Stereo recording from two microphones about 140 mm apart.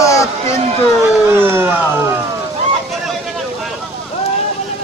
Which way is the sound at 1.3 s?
15° right (ahead or behind).